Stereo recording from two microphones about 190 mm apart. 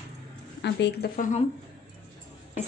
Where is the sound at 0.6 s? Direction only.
65° left (ahead or behind).